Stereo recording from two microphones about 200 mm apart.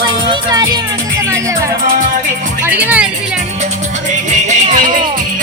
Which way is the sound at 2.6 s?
10° right (ahead or behind).